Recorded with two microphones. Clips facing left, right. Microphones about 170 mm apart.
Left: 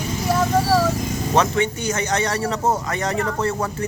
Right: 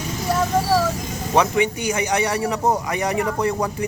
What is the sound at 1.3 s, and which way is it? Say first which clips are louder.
A man's voice: right 2 dB; 15° right (ahead or behind).